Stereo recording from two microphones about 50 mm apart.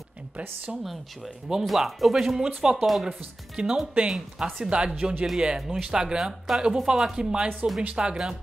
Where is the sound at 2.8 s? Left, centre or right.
Centre.